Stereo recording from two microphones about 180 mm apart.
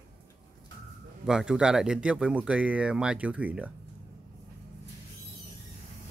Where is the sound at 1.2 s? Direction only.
5° right (ahead or behind).